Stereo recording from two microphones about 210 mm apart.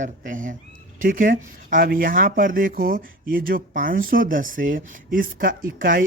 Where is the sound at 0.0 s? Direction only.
40° right (ahead or behind).